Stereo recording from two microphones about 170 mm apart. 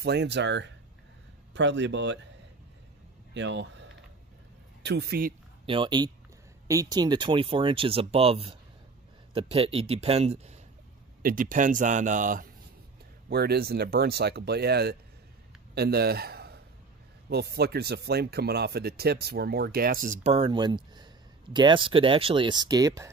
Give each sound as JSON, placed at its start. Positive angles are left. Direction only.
{"t": 0.0, "sound": "speech", "side_deg": -80}
{"t": 3.3, "sound": "speech", "side_deg": -90}
{"t": 4.8, "sound": "speech", "side_deg": -75}
{"t": 5.7, "sound": "speech", "side_deg": -30}
{"t": 11.2, "sound": "speech", "side_deg": -50}
{"t": 13.3, "sound": "a man's voice", "side_deg": -70}
{"t": 20.3, "sound": "speech", "side_deg": -30}